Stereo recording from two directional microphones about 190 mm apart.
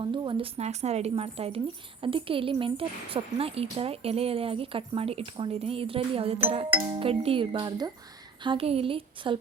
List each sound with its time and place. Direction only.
0.0 s speech: 25° right (ahead or behind)